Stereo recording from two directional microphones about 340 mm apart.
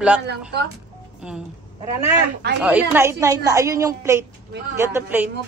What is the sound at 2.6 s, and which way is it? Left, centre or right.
A woman's voice, centre.